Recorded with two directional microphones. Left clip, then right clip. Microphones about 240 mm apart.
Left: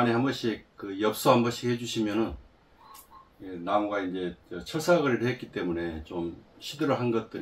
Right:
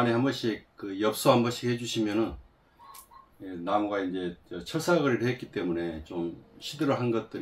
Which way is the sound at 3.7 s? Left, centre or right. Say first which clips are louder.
Left 1 dB; centre.